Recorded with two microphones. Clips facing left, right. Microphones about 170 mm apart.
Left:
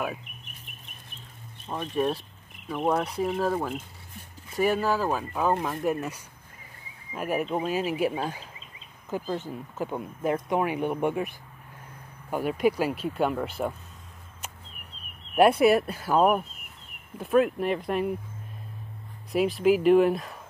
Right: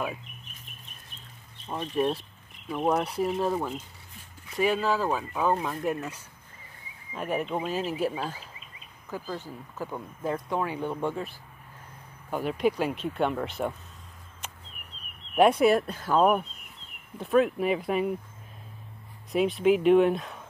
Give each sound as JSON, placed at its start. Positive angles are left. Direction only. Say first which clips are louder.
{"t": 0.0, "sound": "speech", "louder": "left 1 dB", "side_deg": 5}
{"t": 1.7, "sound": "speech", "louder": "even", "side_deg": 0}
{"t": 15.3, "sound": "speech", "louder": "left 1 dB", "side_deg": 5}
{"t": 19.3, "sound": "speech", "louder": "left 1 dB", "side_deg": 0}